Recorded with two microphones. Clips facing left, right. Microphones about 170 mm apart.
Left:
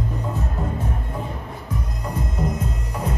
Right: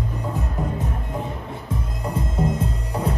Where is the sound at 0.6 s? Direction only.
15° right (ahead or behind).